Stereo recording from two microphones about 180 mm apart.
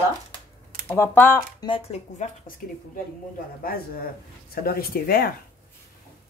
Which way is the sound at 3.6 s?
55° left (ahead or behind).